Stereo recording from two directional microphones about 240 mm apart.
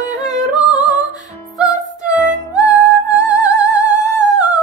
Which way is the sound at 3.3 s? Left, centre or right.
Centre.